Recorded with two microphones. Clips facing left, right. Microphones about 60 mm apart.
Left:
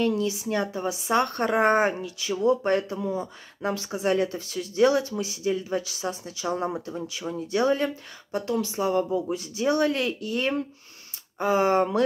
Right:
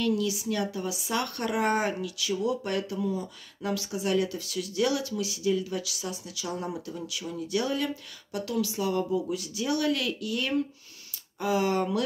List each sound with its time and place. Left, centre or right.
0.0 s speech: left